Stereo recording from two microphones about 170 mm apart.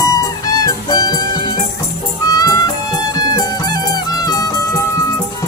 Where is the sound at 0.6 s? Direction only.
20° left (ahead or behind).